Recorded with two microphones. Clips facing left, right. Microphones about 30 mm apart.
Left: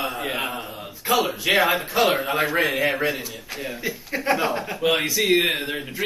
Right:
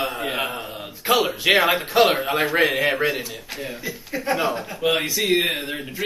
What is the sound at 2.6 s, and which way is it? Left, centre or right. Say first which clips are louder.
Speech: right 4 dB; right.